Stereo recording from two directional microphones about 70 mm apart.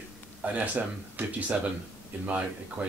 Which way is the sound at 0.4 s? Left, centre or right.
Centre.